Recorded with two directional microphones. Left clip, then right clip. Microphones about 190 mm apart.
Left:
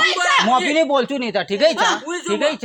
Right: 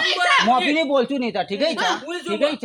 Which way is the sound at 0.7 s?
50° left (ahead or behind).